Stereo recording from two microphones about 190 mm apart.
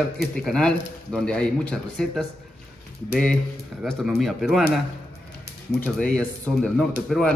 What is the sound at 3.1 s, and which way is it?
A man's voice, 5° left (ahead or behind).